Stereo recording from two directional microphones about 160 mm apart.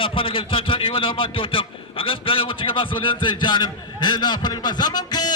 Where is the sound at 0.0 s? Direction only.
35° left (ahead or behind).